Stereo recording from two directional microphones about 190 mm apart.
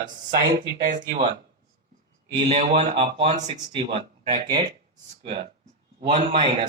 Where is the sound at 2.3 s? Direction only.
35° right (ahead or behind).